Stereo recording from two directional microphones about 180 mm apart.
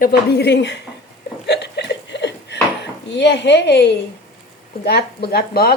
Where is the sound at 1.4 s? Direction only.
70° left (ahead or behind).